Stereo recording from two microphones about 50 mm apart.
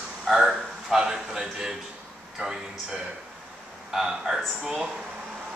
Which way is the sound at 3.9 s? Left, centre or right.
Centre.